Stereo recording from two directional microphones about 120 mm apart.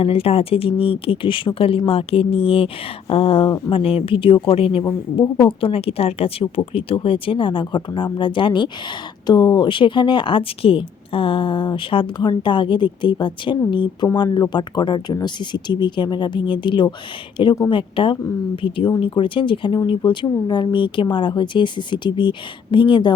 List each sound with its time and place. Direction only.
0.0 s speech: 55° left (ahead or behind)
4.8 s speech: 35° left (ahead or behind)